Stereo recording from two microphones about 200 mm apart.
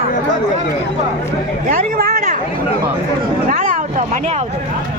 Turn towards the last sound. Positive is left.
turn(degrees=-35)  # may be behind; listen again after turning